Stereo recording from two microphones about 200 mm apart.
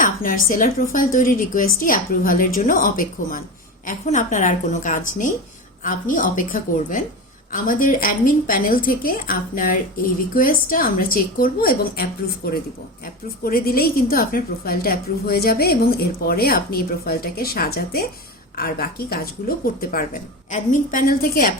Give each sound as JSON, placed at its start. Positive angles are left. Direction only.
{"t": 0.0, "sound": "a woman's voice", "side_deg": 45}